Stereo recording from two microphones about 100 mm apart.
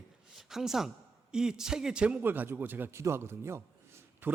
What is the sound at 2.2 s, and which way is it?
A man's voice, 20° right (ahead or behind).